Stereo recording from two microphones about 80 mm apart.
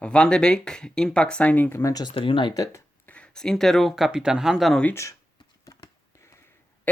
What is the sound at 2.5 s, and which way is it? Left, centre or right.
Speech, left.